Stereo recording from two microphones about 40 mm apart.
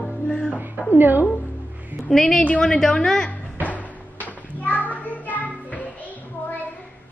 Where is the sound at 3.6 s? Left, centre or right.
Left.